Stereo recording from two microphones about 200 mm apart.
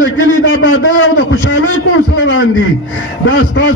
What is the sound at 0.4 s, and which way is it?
A man's voice, 75° left (ahead or behind).